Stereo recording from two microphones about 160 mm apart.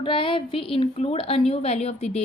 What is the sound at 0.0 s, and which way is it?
A woman's voice, 30° left (ahead or behind).